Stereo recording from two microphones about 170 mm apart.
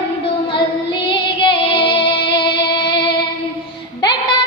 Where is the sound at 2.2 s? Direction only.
30° left (ahead or behind).